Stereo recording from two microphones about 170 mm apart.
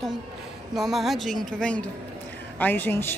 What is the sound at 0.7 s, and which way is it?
A woman's voice, centre (ahead or behind).